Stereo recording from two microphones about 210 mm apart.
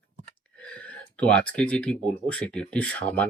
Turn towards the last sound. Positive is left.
turn(degrees=5)  # may be behind; listen again after turning